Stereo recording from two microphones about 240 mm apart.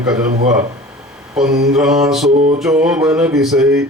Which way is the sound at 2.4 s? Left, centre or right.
Right.